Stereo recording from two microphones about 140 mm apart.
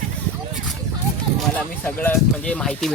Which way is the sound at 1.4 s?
10° left (ahead or behind).